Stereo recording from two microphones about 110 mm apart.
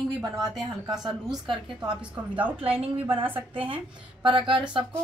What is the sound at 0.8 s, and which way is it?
Speech, 35° right (ahead or behind).